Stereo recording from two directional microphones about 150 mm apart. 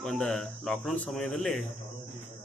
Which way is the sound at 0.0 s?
5° left (ahead or behind).